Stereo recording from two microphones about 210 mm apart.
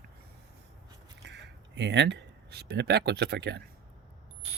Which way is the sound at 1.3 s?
55° right (ahead or behind).